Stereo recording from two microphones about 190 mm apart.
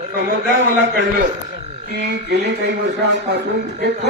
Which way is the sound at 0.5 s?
90° right.